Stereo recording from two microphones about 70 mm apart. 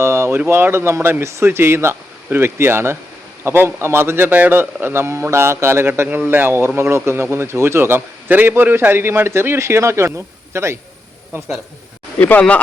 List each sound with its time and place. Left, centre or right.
0.0 s a man's voice: right
12.2 s speech: left